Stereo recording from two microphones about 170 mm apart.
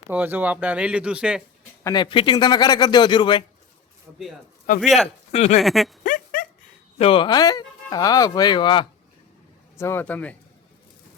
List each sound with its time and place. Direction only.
0.1 s speech: 10° right (ahead or behind)
1.8 s speech: 25° left (ahead or behind)
4.8 s a man's voice: centre (ahead or behind)
5.3 s speech: 40° left (ahead or behind)
5.6 s a man's voice: centre (ahead or behind)
6.0 s a sound: 50° left (ahead or behind)
7.0 s speech: 30° left (ahead or behind)
9.7 s speech: 15° left (ahead or behind)